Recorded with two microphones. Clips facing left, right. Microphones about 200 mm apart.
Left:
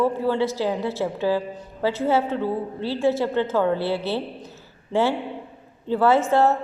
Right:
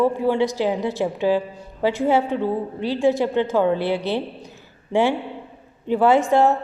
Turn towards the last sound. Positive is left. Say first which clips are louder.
# right 2 dB
turn(degrees=-15)  # may be behind; listen again after turning